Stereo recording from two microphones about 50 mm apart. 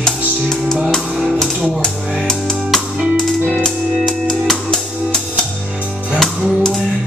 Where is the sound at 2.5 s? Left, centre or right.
Centre.